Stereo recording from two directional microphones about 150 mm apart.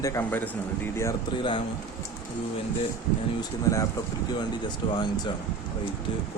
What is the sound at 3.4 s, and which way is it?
Speech, 20° left (ahead or behind).